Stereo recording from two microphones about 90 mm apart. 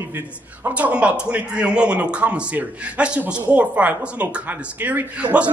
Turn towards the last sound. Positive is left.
turn(degrees=-15)  # may be behind; listen again after turning